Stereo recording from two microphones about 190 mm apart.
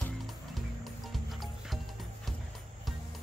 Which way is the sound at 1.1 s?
Centre (ahead or behind).